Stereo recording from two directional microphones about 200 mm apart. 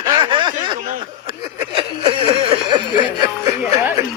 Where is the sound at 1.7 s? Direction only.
30° right (ahead or behind).